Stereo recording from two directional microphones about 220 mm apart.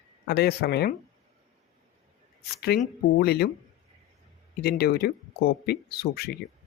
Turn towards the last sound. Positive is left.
turn(degrees=45)  # may be behind; listen again after turning